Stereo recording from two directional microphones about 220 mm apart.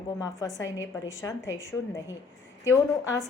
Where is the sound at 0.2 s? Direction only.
15° left (ahead or behind).